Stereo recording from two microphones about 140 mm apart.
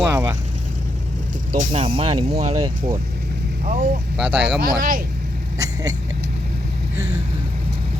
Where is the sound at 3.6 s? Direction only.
60° right (ahead or behind).